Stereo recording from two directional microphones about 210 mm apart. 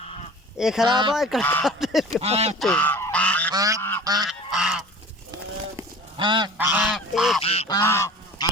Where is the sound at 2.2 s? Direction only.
30° right (ahead or behind).